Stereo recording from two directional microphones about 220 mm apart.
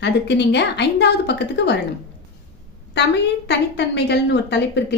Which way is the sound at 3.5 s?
50° left (ahead or behind).